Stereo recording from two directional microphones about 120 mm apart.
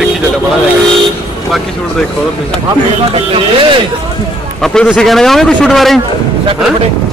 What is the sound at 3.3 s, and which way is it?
Speech, 45° right (ahead or behind).